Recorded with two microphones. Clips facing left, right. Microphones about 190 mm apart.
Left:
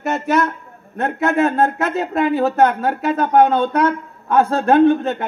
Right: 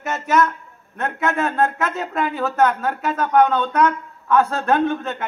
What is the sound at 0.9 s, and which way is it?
Speech, 35° left (ahead or behind).